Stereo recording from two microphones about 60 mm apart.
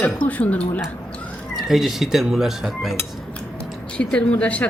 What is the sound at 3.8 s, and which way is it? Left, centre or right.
Speech, centre.